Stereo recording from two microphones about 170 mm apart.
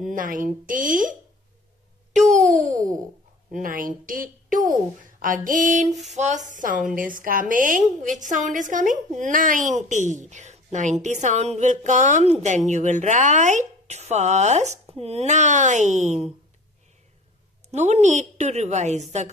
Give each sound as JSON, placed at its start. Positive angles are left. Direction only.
{"t": 0.0, "sound": "a woman's voice", "side_deg": -50}
{"t": 2.1, "sound": "a woman's voice", "side_deg": -45}
{"t": 17.6, "sound": "a woman's voice", "side_deg": -40}